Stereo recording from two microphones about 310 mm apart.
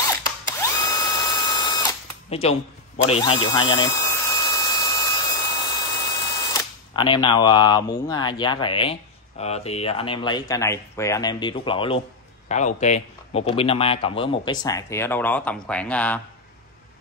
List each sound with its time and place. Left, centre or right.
0.1 s mechanisms: centre
3.1 s a sound: centre
6.5 s speech: centre